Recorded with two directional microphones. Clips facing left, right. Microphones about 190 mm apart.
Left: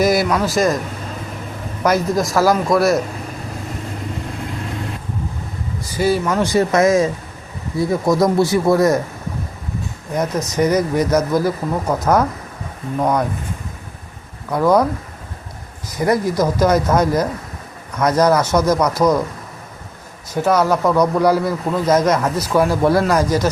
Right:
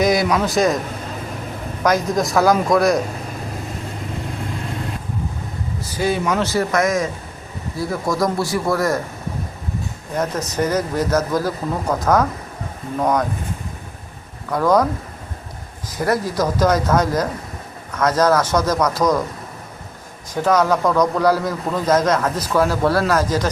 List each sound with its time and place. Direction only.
0.0 s speech: 5° left (ahead or behind)
1.8 s speech: 5° left (ahead or behind)
5.9 s speech: 5° left (ahead or behind)
6.4 s a man's voice: 20° left (ahead or behind)
10.5 s speech: 10° left (ahead or behind)
14.5 s speech: 10° left (ahead or behind)
16.0 s speech: 15° left (ahead or behind)
20.3 s speech: 10° left (ahead or behind)